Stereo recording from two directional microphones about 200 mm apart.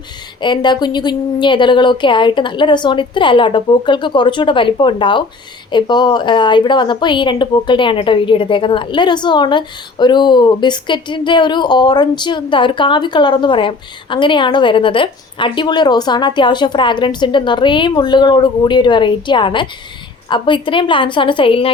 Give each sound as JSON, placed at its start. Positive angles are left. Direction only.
{"t": 0.4, "sound": "a woman's voice", "side_deg": 20}